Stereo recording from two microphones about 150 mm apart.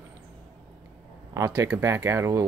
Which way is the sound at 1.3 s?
20° right (ahead or behind).